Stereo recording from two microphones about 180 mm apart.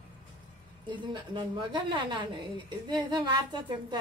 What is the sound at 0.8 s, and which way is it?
A woman's voice, 25° right (ahead or behind).